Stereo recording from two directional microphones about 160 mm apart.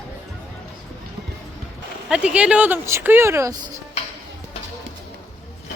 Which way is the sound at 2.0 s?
5° right (ahead or behind).